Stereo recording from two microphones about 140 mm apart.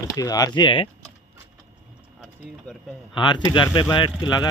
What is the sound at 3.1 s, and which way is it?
Speech, 35° left (ahead or behind).